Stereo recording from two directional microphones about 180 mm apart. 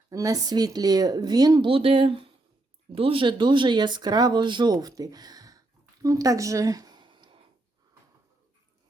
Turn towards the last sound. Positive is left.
turn(degrees=-25)  # may be behind; listen again after turning